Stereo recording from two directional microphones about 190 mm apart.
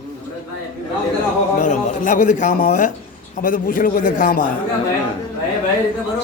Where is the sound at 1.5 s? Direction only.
40° left (ahead or behind).